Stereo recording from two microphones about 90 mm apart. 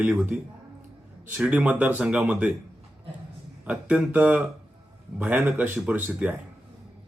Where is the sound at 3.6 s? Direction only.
15° right (ahead or behind).